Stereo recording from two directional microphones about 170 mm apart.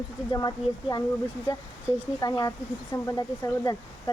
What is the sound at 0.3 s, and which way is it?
Speech, 25° left (ahead or behind).